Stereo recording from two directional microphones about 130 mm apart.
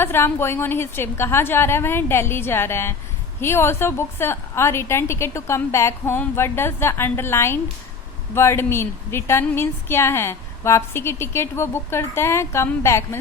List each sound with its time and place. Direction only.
0.0 s a woman's voice: 20° left (ahead or behind)